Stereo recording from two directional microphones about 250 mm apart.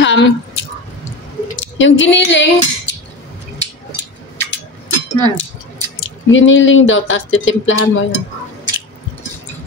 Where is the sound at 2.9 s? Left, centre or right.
Left.